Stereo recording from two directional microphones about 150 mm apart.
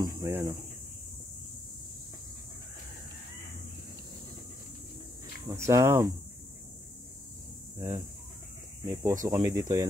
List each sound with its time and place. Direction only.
0.0 s speech: 20° right (ahead or behind)
5.5 s speech: 20° right (ahead or behind)
8.8 s speech: 20° right (ahead or behind)